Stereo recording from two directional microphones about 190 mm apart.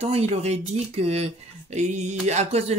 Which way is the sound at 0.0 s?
35° right (ahead or behind).